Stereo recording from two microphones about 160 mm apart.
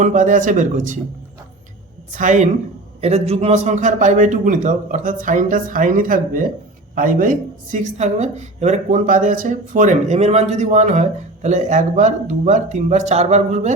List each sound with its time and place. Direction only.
0.0 s a woman's voice: 50° right (ahead or behind)
2.1 s a woman's voice: 50° right (ahead or behind)